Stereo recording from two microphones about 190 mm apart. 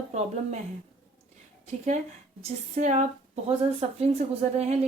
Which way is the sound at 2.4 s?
35° right (ahead or behind).